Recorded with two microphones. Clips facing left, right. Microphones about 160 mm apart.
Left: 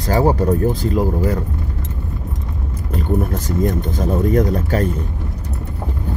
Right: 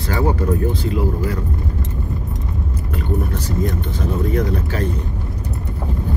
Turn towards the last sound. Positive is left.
turn(degrees=45)  # may be behind; listen again after turning